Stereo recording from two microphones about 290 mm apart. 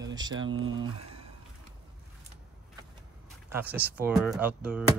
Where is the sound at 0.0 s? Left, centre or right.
Centre.